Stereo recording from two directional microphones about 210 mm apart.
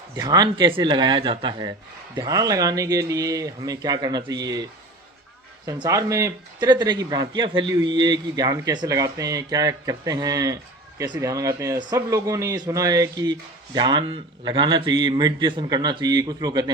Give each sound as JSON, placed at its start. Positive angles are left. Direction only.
{"t": 0.2, "sound": "a man's voice", "side_deg": -20}
{"t": 5.6, "sound": "a man's voice", "side_deg": -15}